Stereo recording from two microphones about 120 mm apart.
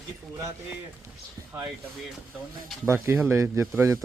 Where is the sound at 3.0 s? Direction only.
20° right (ahead or behind).